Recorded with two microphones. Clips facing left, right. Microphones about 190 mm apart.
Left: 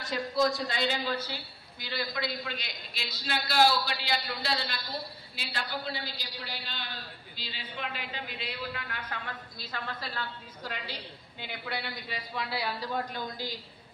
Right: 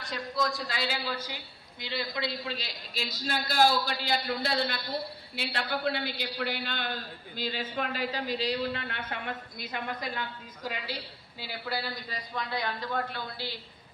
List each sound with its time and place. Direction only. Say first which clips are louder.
0.0 s a woman's voice: left 4 dB; centre (ahead or behind)
1.8 s a man's voice: right 1 dB; 25° right (ahead or behind); by 13.2 s 10° left (ahead or behind)